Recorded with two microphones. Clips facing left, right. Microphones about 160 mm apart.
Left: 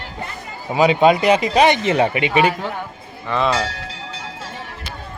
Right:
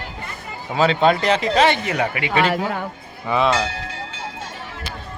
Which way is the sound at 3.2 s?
5° right (ahead or behind).